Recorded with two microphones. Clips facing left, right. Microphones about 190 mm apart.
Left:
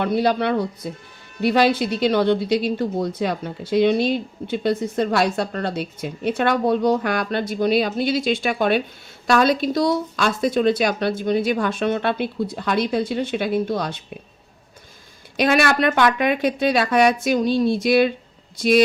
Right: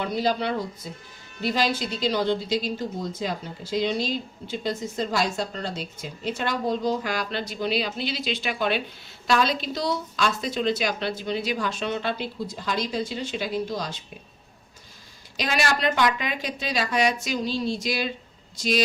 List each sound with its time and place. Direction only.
0.0 s speech: 60° left (ahead or behind)
15.4 s speech: 60° left (ahead or behind)